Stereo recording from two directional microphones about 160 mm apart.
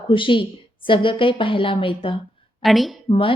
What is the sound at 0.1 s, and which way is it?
A woman's voice, 30° left (ahead or behind).